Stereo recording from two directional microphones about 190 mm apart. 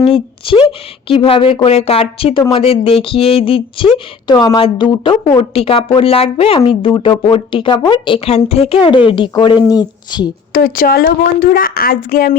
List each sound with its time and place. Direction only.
0.0 s a woman's voice: 30° left (ahead or behind)
10.5 s a woman's voice: 50° left (ahead or behind)